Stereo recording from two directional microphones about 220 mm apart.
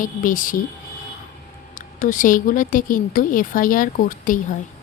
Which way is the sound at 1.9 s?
35° left (ahead or behind).